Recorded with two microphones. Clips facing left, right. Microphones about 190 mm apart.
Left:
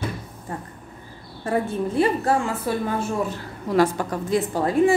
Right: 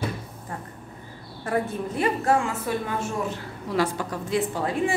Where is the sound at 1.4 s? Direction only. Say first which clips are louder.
Left 3 dB; 30° left (ahead or behind).